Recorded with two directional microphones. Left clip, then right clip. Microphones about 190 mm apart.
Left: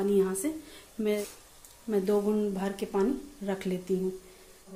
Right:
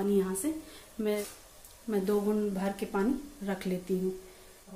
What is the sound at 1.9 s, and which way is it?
Speech, 15° left (ahead or behind).